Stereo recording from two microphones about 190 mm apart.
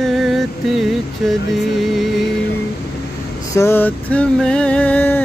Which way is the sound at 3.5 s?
10° left (ahead or behind).